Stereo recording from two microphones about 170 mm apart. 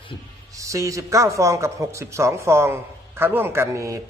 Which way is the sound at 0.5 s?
20° right (ahead or behind).